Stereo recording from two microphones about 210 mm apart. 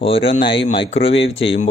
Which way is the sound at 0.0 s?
25° left (ahead or behind).